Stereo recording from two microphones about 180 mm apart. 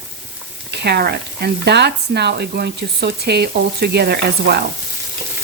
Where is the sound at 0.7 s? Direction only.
65° right (ahead or behind).